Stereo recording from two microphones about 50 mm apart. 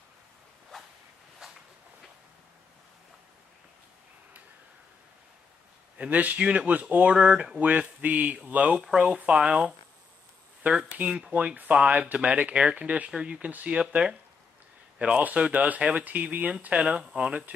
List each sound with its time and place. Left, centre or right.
0.7 s whip: centre
5.9 s speech: right
6.4 s speech: right
6.7 s speech: right
10.7 s speech: centre
11.0 s speech: right
13.5 s speech: right
13.7 s speech: centre